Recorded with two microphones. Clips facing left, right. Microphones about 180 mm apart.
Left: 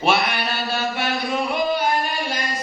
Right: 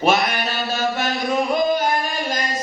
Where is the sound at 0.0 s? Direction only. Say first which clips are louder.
Right 2 dB; 45° right (ahead or behind).